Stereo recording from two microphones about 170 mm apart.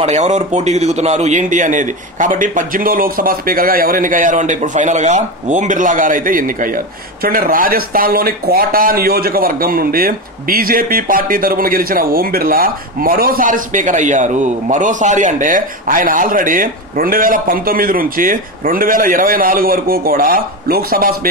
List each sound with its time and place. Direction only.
0.0 s a man's voice: 45° right (ahead or behind); by 21.3 s 60° right (ahead or behind)